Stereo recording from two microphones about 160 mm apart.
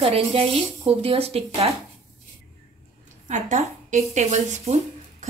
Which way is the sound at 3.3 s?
50° right (ahead or behind).